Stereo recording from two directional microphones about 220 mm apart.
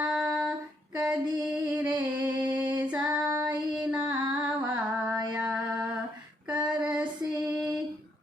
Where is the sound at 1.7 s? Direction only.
5° right (ahead or behind).